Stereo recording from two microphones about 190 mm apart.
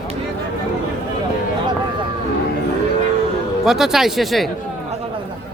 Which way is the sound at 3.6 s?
Centre (ahead or behind).